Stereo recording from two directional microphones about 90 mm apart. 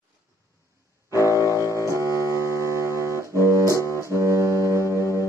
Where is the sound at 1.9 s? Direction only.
35° right (ahead or behind).